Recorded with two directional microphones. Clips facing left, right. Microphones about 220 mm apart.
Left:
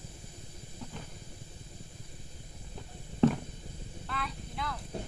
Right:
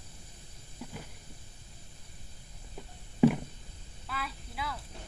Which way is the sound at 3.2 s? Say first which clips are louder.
Right 2 dB; 10° right (ahead or behind).